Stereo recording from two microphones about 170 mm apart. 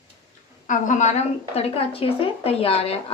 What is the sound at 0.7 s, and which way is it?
Speech, 45° left (ahead or behind).